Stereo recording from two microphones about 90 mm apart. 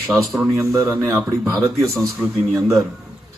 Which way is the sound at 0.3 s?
Centre (ahead or behind).